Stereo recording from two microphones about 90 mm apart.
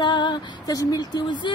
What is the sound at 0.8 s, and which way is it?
Speech, 45° left (ahead or behind).